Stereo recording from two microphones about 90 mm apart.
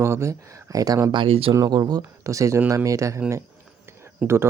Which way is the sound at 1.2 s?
90° right.